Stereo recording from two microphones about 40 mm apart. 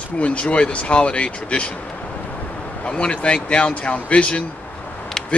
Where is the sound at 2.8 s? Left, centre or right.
Left.